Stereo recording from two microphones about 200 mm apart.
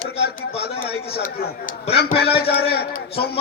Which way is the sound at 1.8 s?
30° left (ahead or behind).